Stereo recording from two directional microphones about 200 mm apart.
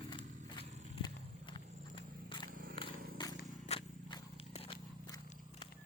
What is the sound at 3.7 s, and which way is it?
Biting, 30° left (ahead or behind).